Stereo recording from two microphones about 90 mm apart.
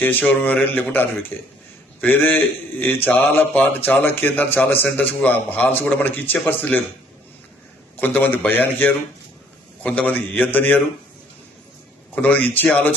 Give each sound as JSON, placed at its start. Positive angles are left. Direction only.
{"t": 0.0, "sound": "a man's voice", "side_deg": 20}
{"t": 7.9, "sound": "a man's voice", "side_deg": 20}
{"t": 12.1, "sound": "a man's voice", "side_deg": 20}